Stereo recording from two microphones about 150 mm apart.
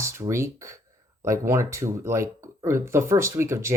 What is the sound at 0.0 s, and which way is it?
Speech, 20° right (ahead or behind).